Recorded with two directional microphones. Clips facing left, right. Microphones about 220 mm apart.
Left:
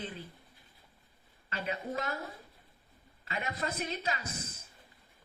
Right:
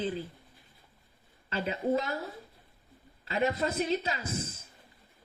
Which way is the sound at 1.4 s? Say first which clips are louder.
Right 4 dB; 30° right (ahead or behind).